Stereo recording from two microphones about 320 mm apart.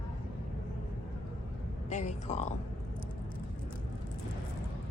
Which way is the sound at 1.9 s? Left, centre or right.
Left.